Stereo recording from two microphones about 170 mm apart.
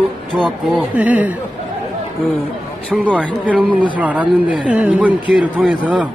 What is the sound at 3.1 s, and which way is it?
A man's voice, 10° right (ahead or behind).